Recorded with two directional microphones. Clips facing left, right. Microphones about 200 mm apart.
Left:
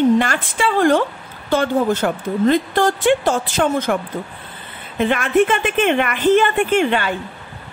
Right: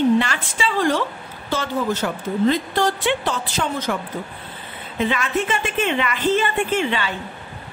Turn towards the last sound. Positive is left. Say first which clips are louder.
# left 5 dB
turn(degrees=55)  # may be behind; listen again after turning